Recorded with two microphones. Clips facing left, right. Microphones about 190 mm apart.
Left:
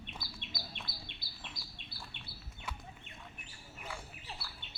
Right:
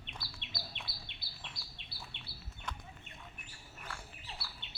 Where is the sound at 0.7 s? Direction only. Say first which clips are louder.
Left 1 dB; 45° left (ahead or behind).